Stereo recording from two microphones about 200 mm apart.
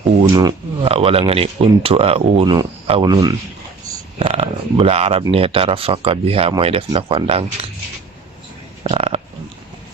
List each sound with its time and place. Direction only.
0.2 s speech: 20° right (ahead or behind)
4.2 s speech: 30° right (ahead or behind)
8.8 s a sound: 30° right (ahead or behind)